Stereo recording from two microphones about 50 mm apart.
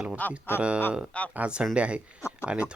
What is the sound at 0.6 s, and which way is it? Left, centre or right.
Speech, right.